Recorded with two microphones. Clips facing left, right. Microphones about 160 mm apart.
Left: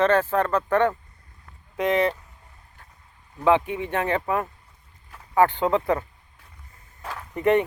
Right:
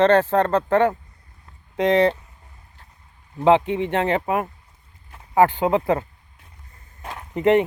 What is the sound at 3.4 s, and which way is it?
Speech, 20° right (ahead or behind).